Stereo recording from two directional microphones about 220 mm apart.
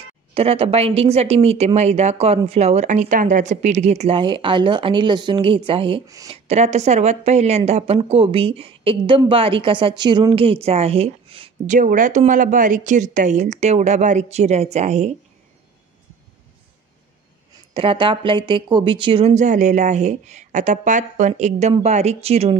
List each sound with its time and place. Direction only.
0.3 s speech: 25° right (ahead or behind)
17.7 s a woman's voice: 25° right (ahead or behind)